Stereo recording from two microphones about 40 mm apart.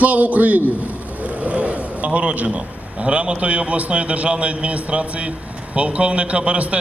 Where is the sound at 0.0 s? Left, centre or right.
Right.